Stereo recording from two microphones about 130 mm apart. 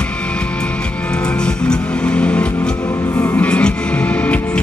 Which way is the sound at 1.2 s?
10° left (ahead or behind).